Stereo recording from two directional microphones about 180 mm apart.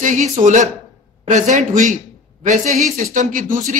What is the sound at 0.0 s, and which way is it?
Speech, 45° right (ahead or behind).